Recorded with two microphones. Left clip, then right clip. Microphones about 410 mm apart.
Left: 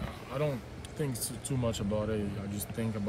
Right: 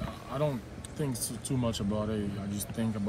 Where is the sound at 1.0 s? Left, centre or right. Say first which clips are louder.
Right 1 dB; centre.